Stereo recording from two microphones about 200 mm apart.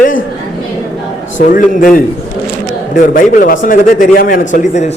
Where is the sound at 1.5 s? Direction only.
40° left (ahead or behind).